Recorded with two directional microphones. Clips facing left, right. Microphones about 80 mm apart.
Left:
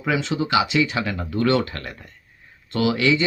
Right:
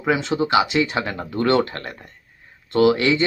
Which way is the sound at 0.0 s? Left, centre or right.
Right.